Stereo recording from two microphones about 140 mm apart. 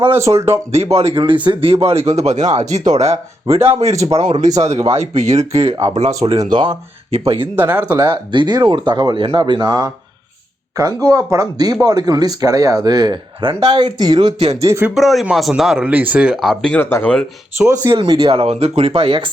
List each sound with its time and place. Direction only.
0.1 s speech: 20° right (ahead or behind)
0.9 s speech: 40° right (ahead or behind)
6.5 s speech: 35° right (ahead or behind)
7.1 s speech: 45° right (ahead or behind)
7.5 s speech: 15° right (ahead or behind)
7.9 s speech: 35° right (ahead or behind)
14.6 s speech: 20° right (ahead or behind)
14.8 s speech: centre (ahead or behind)
16.8 s speech: 15° left (ahead or behind)
17.9 s speech: 35° right (ahead or behind)
18.3 s speech: 45° right (ahead or behind)